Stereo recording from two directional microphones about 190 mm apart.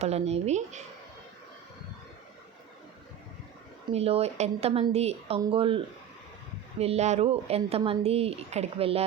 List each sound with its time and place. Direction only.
0.0 s speech: 35° right (ahead or behind)
3.9 s speech: 30° right (ahead or behind)